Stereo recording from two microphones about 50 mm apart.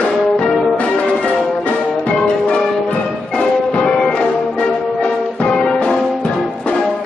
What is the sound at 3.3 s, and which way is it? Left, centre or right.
Music, centre.